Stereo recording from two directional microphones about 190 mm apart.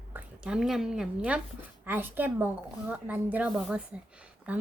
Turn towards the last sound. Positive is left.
turn(degrees=-5)  # may be behind; listen again after turning